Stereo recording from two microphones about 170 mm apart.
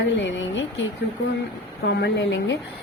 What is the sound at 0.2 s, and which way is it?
Speech, 90° left.